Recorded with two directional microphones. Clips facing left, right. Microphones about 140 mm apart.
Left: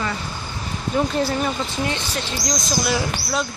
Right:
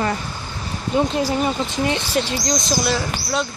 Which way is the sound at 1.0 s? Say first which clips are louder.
Right 2 dB; 15° right (ahead or behind).